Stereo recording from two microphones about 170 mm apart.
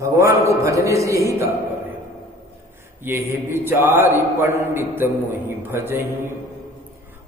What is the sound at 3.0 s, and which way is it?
A man's voice, 15° right (ahead or behind).